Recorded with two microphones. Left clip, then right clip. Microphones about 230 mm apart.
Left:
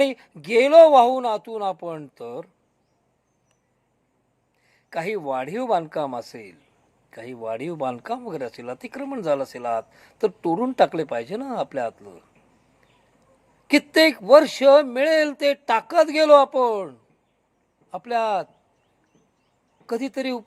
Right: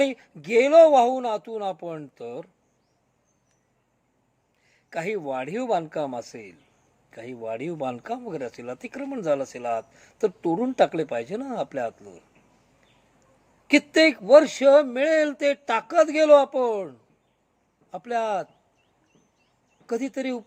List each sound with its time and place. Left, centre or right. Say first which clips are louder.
0.1 s a man's voice: left 1 dB; centre
5.2 s a man's voice: left 3 dB; centre
13.7 s a man's voice: left 1 dB; centre
17.9 s a man's voice: left 3 dB; centre
19.9 s a man's voice: left 2 dB; centre